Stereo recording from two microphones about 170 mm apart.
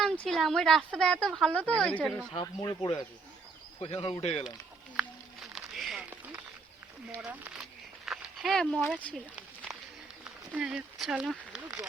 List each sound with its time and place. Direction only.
0.0 s speech: centre (ahead or behind)
2.3 s a man's voice: 25° left (ahead or behind)
4.9 s a sound: 5° right (ahead or behind)
9.7 s run: 5° right (ahead or behind)
10.5 s speech: 5° right (ahead or behind)